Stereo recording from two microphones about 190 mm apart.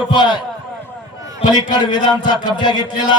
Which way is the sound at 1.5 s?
20° left (ahead or behind).